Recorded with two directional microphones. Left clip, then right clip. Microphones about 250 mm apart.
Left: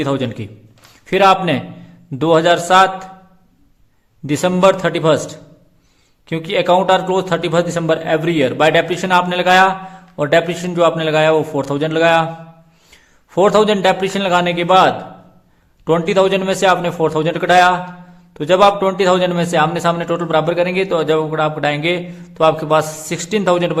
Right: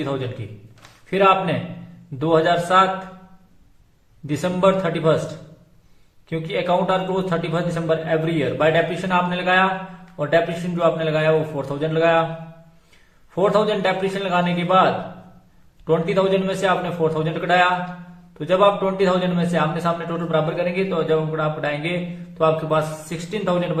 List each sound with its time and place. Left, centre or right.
0.0 s a man's voice: left
4.3 s a man's voice: left
6.2 s a man's voice: left
13.3 s a man's voice: left